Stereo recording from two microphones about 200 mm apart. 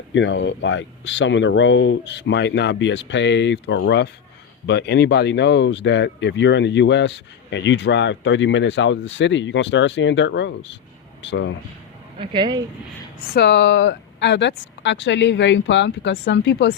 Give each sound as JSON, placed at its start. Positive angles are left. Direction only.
{"t": 0.1, "sound": "speech", "side_deg": 65}
{"t": 12.2, "sound": "speech", "side_deg": -25}
{"t": 13.3, "sound": "speech", "side_deg": 60}